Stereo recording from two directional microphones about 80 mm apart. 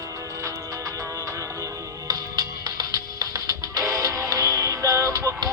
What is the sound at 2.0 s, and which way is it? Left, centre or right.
Music, right.